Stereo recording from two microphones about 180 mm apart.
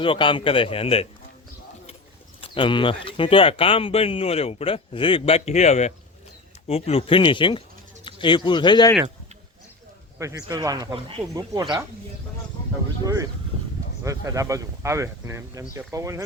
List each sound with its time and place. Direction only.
0.0 s a man's voice: 25° left (ahead or behind)
2.4 s a man's voice: 25° left (ahead or behind)
10.2 s speech: 15° right (ahead or behind)
14.0 s speech: 20° right (ahead or behind)